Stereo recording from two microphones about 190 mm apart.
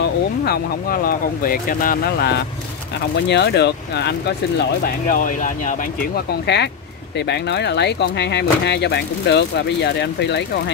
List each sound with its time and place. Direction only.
0.5 s speech: 50° left (ahead or behind)
4.8 s speech: 45° left (ahead or behind)
6.4 s speech: 60° left (ahead or behind)